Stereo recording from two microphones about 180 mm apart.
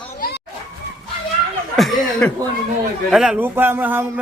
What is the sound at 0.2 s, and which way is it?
Children playing, 60° left (ahead or behind).